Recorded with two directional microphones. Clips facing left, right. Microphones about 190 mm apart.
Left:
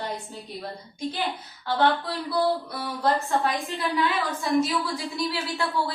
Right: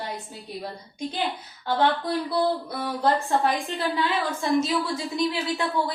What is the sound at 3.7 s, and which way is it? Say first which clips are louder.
A woman's voice: even; 25° right (ahead or behind).